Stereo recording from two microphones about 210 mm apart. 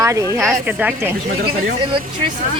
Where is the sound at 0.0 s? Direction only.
15° right (ahead or behind).